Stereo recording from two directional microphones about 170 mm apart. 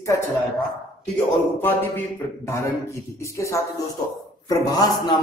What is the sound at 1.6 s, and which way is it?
A man's voice, 10° left (ahead or behind).